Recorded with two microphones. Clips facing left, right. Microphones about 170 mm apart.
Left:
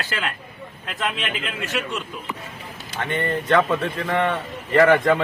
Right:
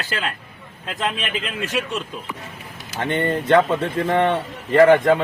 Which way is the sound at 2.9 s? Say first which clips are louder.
Right 3 dB; 35° right (ahead or behind).